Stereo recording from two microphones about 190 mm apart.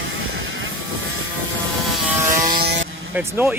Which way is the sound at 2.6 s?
60° right (ahead or behind).